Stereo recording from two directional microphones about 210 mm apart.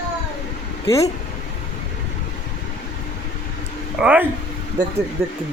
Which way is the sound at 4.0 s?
5° right (ahead or behind).